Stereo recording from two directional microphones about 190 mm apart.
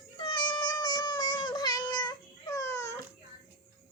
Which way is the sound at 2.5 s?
15° left (ahead or behind).